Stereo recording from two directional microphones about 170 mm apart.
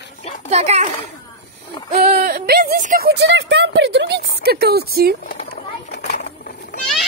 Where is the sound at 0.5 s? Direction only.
40° right (ahead or behind).